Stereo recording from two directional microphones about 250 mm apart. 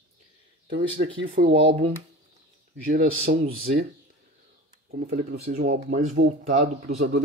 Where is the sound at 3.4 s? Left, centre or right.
Right.